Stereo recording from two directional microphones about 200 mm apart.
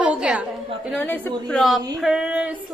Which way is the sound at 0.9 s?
10° left (ahead or behind).